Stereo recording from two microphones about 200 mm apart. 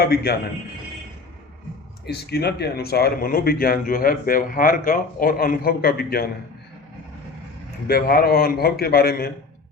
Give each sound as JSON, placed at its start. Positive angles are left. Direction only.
{"t": 0.0, "sound": "speech", "side_deg": 50}
{"t": 2.0, "sound": "speech", "side_deg": 55}
{"t": 7.9, "sound": "speech", "side_deg": 50}